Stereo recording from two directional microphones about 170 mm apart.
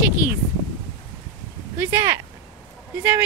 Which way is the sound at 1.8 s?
15° right (ahead or behind).